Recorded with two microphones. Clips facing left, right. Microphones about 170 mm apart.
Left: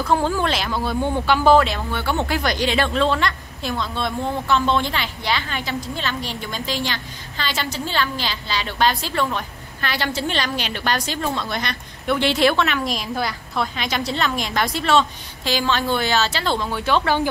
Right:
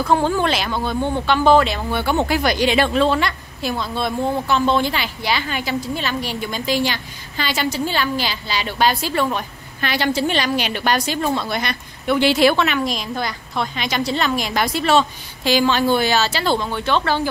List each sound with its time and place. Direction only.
0.1 s speech: centre (ahead or behind)
1.9 s a woman's voice: 15° right (ahead or behind); by 17.3 s 15° left (ahead or behind)